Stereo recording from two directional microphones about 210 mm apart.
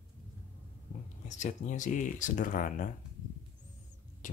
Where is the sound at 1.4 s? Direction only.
35° left (ahead or behind).